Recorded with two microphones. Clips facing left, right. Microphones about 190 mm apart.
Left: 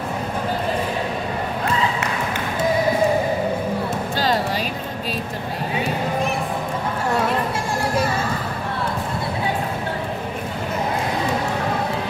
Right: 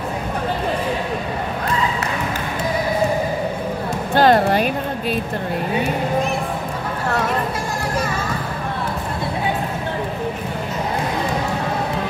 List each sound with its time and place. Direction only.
4.1 s music: 55° right (ahead or behind)